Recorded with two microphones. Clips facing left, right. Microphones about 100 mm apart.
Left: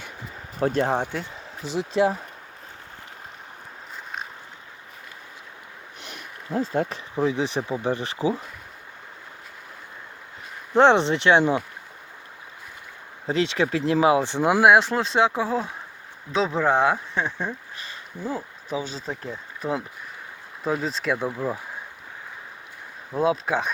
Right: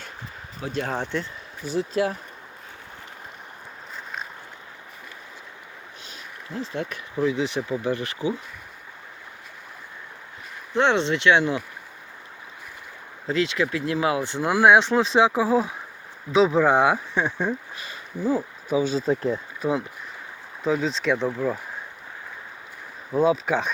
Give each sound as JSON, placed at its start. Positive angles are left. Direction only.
{"t": 0.6, "sound": "speech", "side_deg": 45}
{"t": 0.9, "sound": "speech", "side_deg": 15}
{"t": 6.5, "sound": "speech", "side_deg": 40}
{"t": 10.8, "sound": "speech", "side_deg": 30}
{"t": 13.2, "sound": "speech", "side_deg": 25}
{"t": 14.6, "sound": "speech", "side_deg": 5}
{"t": 18.7, "sound": "speech", "side_deg": 30}
{"t": 20.7, "sound": "speech", "side_deg": 5}
{"t": 23.2, "sound": "speech", "side_deg": 5}